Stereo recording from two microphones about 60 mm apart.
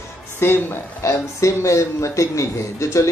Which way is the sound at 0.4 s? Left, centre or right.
Left.